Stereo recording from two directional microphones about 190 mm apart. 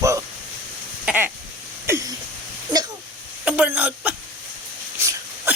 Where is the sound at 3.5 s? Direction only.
5° right (ahead or behind).